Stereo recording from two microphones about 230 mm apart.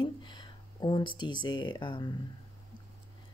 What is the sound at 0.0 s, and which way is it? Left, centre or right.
Speech, centre.